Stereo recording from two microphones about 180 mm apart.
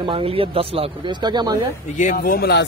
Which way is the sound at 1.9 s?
45° left (ahead or behind).